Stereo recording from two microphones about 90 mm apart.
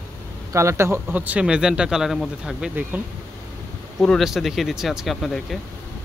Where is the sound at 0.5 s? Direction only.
30° right (ahead or behind).